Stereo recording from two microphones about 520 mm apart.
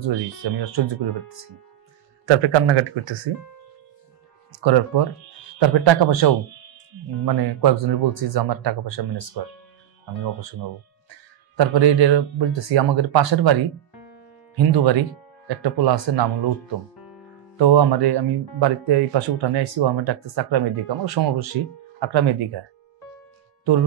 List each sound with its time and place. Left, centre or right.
0.0 s speech: right
4.9 s speech: right
11.5 s speech: right
14.5 s speech: right
17.6 s speech: right